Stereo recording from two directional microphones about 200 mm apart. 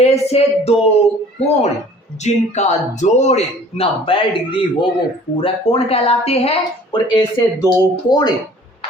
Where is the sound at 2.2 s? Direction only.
35° left (ahead or behind).